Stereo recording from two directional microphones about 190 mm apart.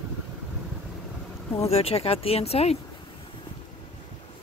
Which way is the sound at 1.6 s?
30° left (ahead or behind).